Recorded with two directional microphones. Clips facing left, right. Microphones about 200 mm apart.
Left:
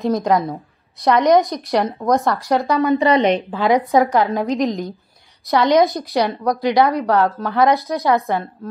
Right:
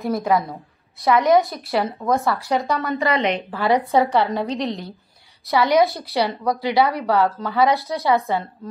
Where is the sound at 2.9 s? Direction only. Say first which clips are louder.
Left 5 dB; 35° left (ahead or behind).